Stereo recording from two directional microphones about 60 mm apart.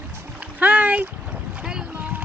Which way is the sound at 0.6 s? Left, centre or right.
Right.